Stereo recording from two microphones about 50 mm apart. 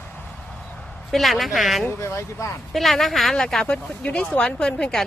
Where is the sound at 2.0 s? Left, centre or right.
Left.